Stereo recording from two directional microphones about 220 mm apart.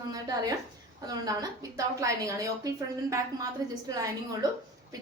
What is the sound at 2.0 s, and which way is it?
A woman's voice, 15° right (ahead or behind).